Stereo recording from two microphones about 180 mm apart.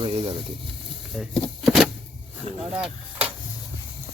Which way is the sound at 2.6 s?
5° right (ahead or behind).